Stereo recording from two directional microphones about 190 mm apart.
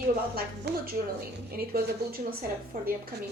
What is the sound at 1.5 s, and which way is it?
A woman's voice, 50° right (ahead or behind).